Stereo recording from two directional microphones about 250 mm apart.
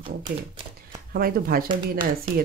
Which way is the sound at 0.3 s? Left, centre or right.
Right.